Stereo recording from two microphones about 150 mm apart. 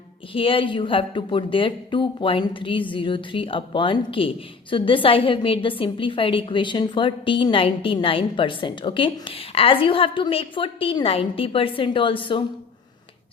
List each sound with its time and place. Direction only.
0.3 s a woman's voice: 35° left (ahead or behind)